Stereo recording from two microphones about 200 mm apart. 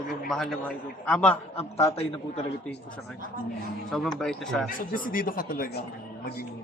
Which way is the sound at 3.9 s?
Centre (ahead or behind).